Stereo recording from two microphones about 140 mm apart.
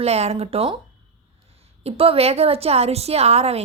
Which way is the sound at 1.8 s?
45° right (ahead or behind).